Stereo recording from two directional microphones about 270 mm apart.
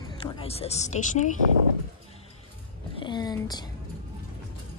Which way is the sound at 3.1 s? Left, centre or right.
Centre.